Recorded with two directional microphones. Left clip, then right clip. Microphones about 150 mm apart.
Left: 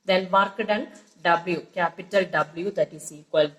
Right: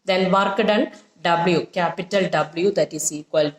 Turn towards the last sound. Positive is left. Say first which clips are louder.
# right 2 dB
turn(degrees=-20)  # may be behind; listen again after turning